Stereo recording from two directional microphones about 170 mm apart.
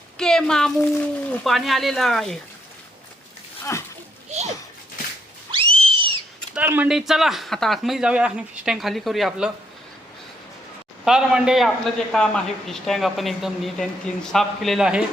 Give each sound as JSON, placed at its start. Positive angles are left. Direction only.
{"t": 0.2, "sound": "a child's voice", "side_deg": 5}
{"t": 1.5, "sound": "speech", "side_deg": 0}
{"t": 3.6, "sound": "splash", "side_deg": 15}
{"t": 5.5, "sound": "a sound", "side_deg": -35}
{"t": 6.5, "sound": "speech", "side_deg": -10}
{"t": 11.0, "sound": "speech", "side_deg": -5}